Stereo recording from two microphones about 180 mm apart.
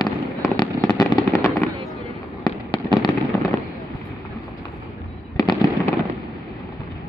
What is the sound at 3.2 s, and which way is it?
Fireworks, 20° left (ahead or behind).